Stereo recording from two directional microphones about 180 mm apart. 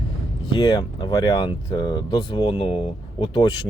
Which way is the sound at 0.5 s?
20° left (ahead or behind).